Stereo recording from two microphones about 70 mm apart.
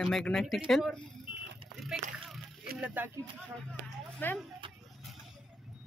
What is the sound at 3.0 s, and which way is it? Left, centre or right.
Speech, right.